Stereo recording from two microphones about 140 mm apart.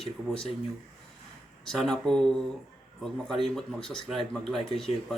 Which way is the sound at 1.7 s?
Centre (ahead or behind).